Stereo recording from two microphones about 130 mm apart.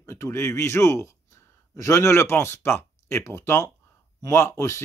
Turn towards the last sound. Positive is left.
turn(degrees=20)  # may be behind; listen again after turning